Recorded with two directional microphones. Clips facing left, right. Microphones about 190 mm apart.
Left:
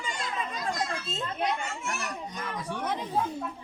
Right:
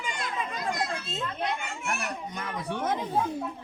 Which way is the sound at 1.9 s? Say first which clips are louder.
Right 2 dB; 60° right (ahead or behind).